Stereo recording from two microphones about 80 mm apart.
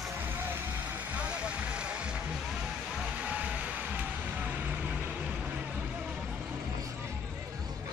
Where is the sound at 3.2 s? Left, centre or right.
Centre.